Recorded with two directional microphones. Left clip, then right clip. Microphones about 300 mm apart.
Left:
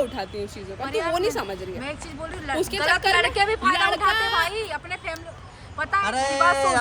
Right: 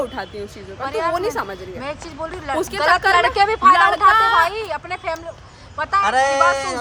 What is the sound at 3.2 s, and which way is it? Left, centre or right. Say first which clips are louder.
Speech: right 5 dB; centre.